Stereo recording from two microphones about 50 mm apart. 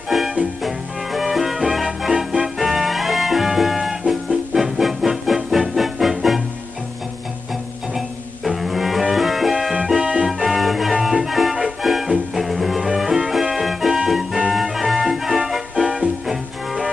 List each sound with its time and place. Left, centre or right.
0.1 s music: centre
8.5 s bowed string instrument: centre
9.1 s music: centre
9.9 s music: right
10.2 s music: centre